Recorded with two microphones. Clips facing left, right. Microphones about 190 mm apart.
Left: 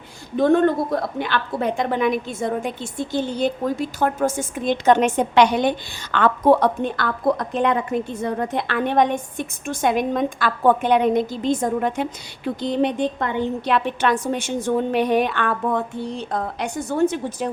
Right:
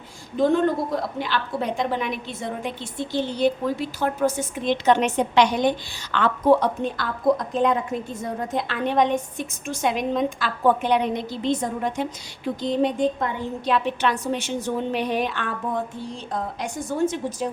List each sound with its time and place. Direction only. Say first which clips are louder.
0.3 s a woman's voice: left 3 dB; 60° left (ahead or behind)
12.6 s a woman's voice: even; 70° left (ahead or behind)